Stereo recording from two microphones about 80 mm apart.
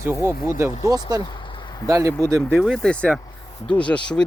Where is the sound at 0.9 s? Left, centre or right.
Right.